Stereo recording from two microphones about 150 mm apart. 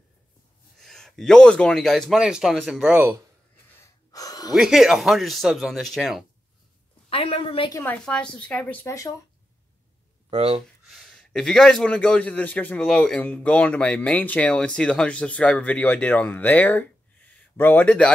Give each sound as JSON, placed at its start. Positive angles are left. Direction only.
{"t": 0.7, "sound": "a man's voice", "side_deg": 5}
{"t": 3.8, "sound": "gasp", "side_deg": 25}
{"t": 4.6, "sound": "a man's voice", "side_deg": -5}
{"t": 7.1, "sound": "a woman's voice", "side_deg": 40}
{"t": 7.7, "sound": "a man's voice", "side_deg": 15}
{"t": 10.3, "sound": "speech", "side_deg": -40}
{"t": 10.9, "sound": "a man's voice", "side_deg": 0}